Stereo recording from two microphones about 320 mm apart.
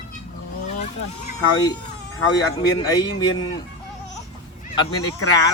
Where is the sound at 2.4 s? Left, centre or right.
Centre.